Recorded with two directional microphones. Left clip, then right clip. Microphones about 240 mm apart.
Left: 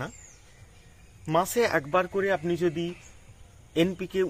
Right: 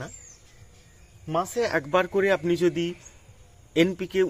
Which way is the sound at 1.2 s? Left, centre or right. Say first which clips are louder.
Left 2 dB; centre.